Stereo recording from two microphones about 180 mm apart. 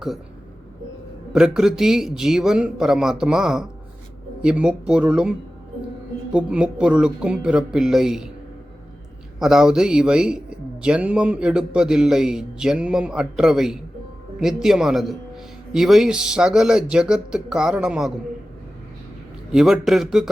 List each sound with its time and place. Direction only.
1.3 s a man's voice: 5° right (ahead or behind)
6.3 s a man's voice: 5° right (ahead or behind)
9.4 s a man's voice: centre (ahead or behind)
19.5 s a man's voice: 5° right (ahead or behind)